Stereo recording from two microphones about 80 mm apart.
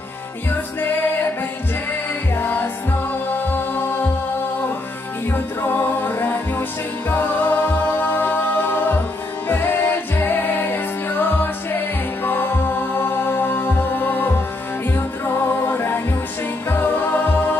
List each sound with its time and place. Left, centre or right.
2.3 s music: left
5.3 s music: left
7.1 s a capella: left
9.5 s music: left